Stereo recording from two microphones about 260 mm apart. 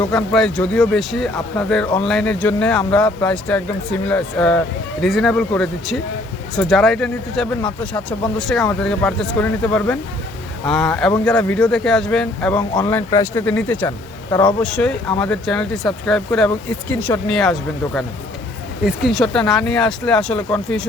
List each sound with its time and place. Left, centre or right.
0.1 s speech: centre
14.3 s speech: centre
14.6 s speech: centre